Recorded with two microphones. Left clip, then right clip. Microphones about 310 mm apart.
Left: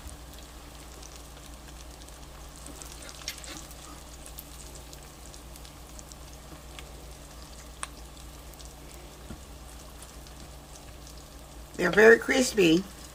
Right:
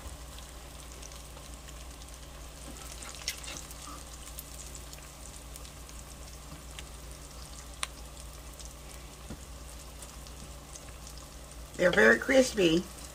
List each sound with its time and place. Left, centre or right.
7.8 s frying: centre
11.8 s speech: left